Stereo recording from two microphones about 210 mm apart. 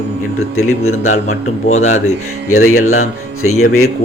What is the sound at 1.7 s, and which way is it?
Speech, 30° left (ahead or behind).